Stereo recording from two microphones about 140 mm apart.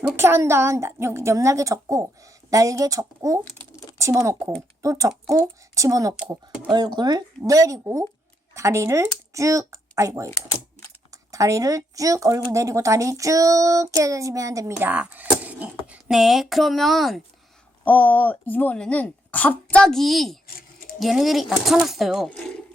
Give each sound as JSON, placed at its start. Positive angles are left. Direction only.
{"t": 0.2, "sound": "speech", "side_deg": -20}
{"t": 6.1, "sound": "speech", "side_deg": -15}
{"t": 6.7, "sound": "speech", "side_deg": -30}
{"t": 10.2, "sound": "speech", "side_deg": 15}
{"t": 11.1, "sound": "speech", "side_deg": -25}
{"t": 17.8, "sound": "speech", "side_deg": 10}